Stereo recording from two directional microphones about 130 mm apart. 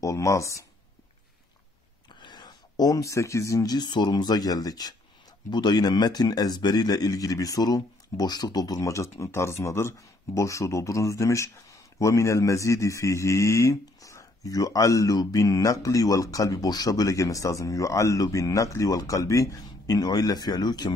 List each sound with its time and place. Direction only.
0.0 s speech: 25° left (ahead or behind)
2.1 s a man's voice: 35° left (ahead or behind)